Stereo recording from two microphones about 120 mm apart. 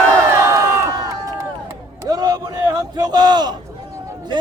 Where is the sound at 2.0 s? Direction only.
30° right (ahead or behind).